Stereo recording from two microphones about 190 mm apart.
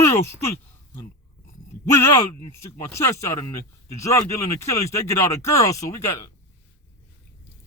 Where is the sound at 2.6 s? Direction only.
15° left (ahead or behind).